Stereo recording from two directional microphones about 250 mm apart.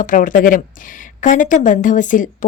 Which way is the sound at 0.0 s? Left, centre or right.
Left.